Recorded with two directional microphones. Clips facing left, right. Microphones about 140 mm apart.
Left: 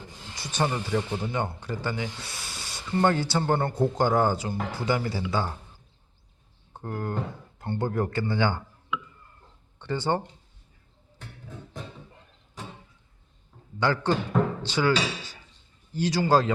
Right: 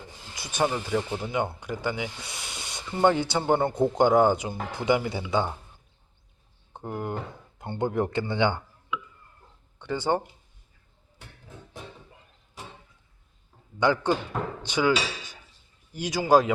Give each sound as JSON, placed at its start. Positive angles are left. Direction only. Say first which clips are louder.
{"t": 0.3, "sound": "a man's voice", "louder": "right 1 dB", "side_deg": -10}
{"t": 6.7, "sound": "a man's voice", "louder": "left 1 dB", "side_deg": -15}
{"t": 9.7, "sound": "speech", "louder": "right 1 dB", "side_deg": -10}
{"t": 13.7, "sound": "speech", "louder": "right 1 dB", "side_deg": -15}